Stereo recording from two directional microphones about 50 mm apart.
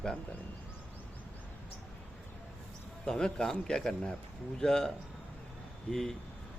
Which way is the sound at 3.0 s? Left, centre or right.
Centre.